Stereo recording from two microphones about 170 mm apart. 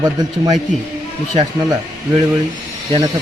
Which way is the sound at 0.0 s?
25° right (ahead or behind).